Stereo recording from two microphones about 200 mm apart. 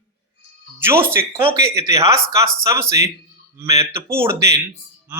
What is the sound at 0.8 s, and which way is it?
Speech, 10° right (ahead or behind).